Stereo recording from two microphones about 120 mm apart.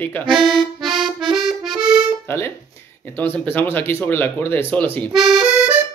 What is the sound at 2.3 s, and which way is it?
Speech, 20° left (ahead or behind).